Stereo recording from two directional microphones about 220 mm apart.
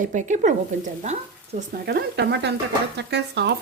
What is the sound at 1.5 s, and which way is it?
Speech, 45° right (ahead or behind).